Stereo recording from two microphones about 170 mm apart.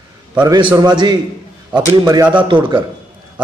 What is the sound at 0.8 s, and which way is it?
A man's voice, 25° right (ahead or behind).